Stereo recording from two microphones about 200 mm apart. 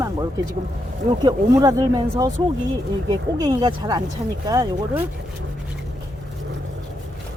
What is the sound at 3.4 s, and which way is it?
Speech, 20° right (ahead or behind).